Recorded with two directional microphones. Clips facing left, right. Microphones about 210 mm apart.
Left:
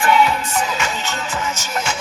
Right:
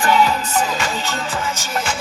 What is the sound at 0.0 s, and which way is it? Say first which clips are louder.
Music: even; 35° right (ahead or behind).